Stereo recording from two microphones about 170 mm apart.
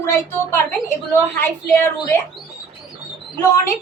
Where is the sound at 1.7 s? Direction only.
15° left (ahead or behind).